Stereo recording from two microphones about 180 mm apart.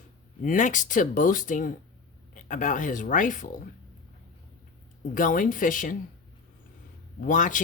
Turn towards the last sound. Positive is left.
turn(degrees=45)  # may be behind; listen again after turning